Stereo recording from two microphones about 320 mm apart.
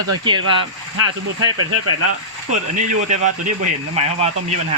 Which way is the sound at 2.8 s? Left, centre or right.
Right.